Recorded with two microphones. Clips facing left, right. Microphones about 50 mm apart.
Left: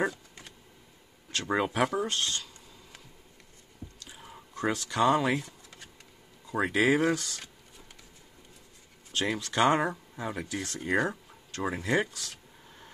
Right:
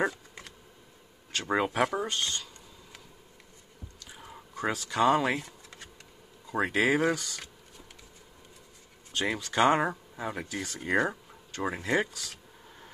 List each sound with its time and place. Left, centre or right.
1.3 s speech: centre
2.0 s speech: centre
4.1 s a sound: centre
6.4 s speech: centre
9.2 s speech: centre